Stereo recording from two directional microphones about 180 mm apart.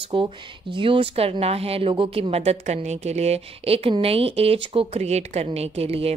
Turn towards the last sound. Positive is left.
turn(degrees=-35)  # may be behind; listen again after turning